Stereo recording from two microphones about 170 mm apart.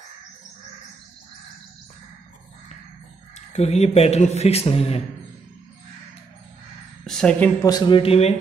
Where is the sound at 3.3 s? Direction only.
40° left (ahead or behind).